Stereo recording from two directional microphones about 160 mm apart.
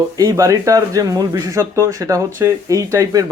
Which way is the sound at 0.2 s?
20° right (ahead or behind).